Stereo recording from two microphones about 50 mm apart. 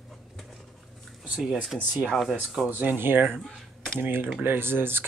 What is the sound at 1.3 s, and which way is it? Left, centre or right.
Speech, centre.